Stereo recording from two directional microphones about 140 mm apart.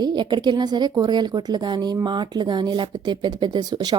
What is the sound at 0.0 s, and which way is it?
A woman's voice, 30° right (ahead or behind).